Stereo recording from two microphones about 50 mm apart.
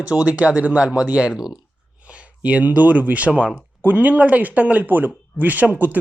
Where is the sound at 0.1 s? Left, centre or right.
Right.